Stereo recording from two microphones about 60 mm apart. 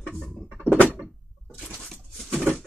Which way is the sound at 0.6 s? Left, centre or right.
Right.